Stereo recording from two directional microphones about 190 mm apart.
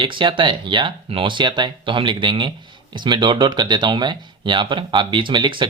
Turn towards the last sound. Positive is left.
turn(degrees=-25)  # may be behind; listen again after turning